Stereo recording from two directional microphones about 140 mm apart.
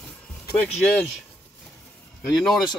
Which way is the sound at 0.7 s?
5° left (ahead or behind).